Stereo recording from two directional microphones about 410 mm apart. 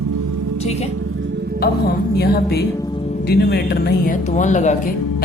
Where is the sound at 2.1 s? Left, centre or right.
Left.